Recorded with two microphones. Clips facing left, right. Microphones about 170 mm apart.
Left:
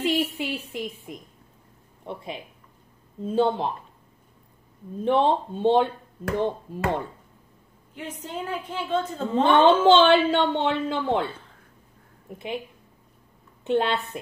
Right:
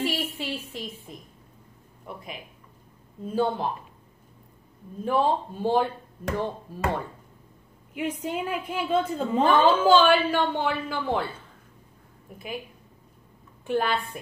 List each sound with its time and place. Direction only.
0.0 s a woman's voice: 20° left (ahead or behind)
2.0 s a woman's voice: 30° left (ahead or behind)
5.0 s a woman's voice: 25° left (ahead or behind)
7.9 s a woman's voice: 10° right (ahead or behind)
9.4 s a woman's voice: 25° left (ahead or behind)
12.3 s a woman's voice: 25° left (ahead or behind)
13.7 s a woman's voice: 25° left (ahead or behind)